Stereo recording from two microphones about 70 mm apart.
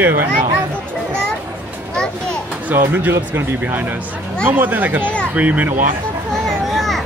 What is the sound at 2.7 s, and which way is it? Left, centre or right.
Speech, right.